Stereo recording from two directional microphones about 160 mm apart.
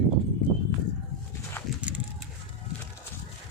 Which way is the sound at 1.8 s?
5° right (ahead or behind).